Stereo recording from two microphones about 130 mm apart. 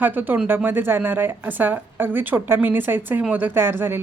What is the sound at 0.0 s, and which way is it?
A woman's voice, 15° right (ahead or behind).